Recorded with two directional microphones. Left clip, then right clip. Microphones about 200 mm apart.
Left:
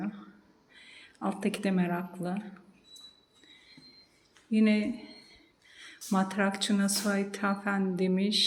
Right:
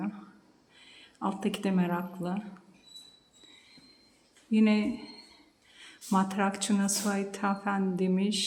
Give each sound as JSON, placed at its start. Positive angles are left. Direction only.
{"t": 0.8, "sound": "speech", "side_deg": 0}
{"t": 4.5, "sound": "a woman's voice", "side_deg": -5}